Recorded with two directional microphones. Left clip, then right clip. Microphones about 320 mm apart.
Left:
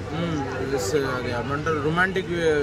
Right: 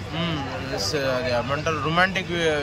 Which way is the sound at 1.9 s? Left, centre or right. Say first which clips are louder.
Right 3 dB; centre.